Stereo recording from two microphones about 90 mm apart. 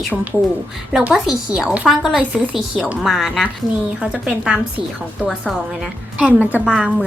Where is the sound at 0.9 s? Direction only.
5° right (ahead or behind).